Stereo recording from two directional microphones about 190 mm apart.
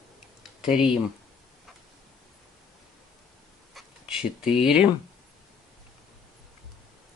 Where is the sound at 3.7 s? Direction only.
5° right (ahead or behind).